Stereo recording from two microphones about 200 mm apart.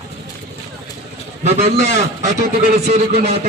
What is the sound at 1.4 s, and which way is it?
A man's voice, 35° right (ahead or behind).